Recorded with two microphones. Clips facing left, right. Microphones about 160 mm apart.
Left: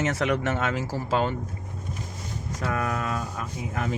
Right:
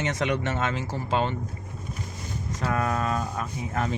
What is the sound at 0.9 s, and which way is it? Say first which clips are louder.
Speech: left 1 dB; 25° right (ahead or behind).